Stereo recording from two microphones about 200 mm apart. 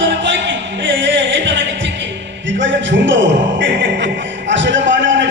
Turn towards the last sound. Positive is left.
turn(degrees=-65)  # may be behind; listen again after turning